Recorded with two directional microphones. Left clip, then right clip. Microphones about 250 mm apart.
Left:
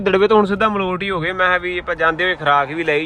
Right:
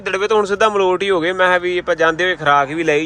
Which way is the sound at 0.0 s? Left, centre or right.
Centre.